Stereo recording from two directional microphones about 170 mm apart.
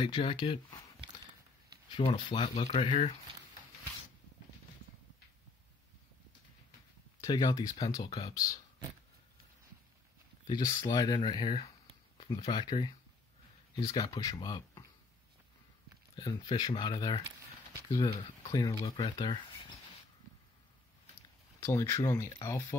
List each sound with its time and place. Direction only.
0.0 s speech: 30° left (ahead or behind)
2.0 s speech: 30° left (ahead or behind)
7.2 s speech: 25° left (ahead or behind)
10.4 s speech: 25° left (ahead or behind)
12.3 s speech: 20° left (ahead or behind)
16.2 s speech: 30° left (ahead or behind)
21.5 s speech: 15° left (ahead or behind)